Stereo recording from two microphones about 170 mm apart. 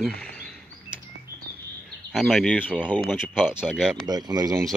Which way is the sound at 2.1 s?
Centre (ahead or behind).